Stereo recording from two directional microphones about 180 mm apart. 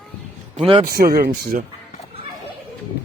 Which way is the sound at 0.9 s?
55° right (ahead or behind).